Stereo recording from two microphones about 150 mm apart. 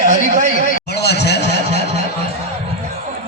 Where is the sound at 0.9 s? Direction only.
90° left.